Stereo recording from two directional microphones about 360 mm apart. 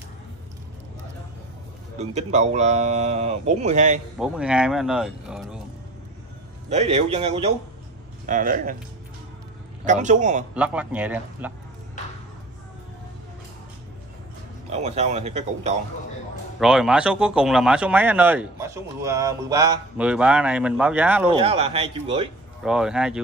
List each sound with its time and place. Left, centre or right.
2.0 s speech: centre
4.2 s speech: centre
6.7 s a man's voice: centre
9.8 s a man's voice: centre
10.5 s speech: centre
14.7 s speech: centre
16.5 s speech: centre
21.3 s speech: centre
22.6 s speech: centre